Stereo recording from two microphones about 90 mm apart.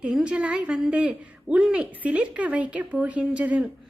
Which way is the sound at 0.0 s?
10° right (ahead or behind).